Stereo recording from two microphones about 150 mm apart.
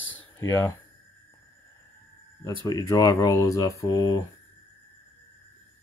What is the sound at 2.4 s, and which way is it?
Speech, 25° left (ahead or behind).